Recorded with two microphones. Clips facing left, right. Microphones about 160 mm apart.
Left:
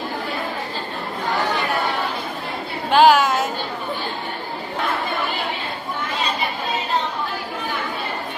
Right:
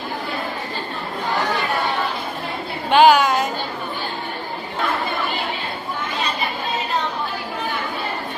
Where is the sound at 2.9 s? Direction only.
Centre (ahead or behind).